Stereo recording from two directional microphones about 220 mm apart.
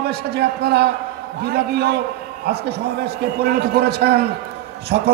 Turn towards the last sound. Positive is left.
turn(degrees=-45)  # may be behind; listen again after turning